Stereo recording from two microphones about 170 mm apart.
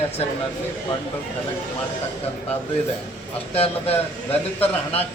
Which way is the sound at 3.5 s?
35° left (ahead or behind).